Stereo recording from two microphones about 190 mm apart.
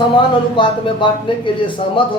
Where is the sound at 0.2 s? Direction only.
25° left (ahead or behind).